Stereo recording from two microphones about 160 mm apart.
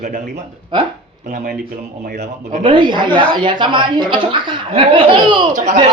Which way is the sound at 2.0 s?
50° right (ahead or behind).